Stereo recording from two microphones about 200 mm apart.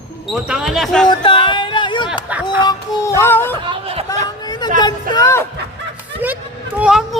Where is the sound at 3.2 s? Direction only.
10° left (ahead or behind).